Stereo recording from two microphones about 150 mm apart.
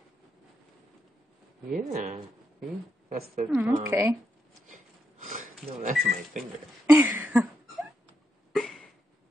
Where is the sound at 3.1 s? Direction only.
70° right (ahead or behind).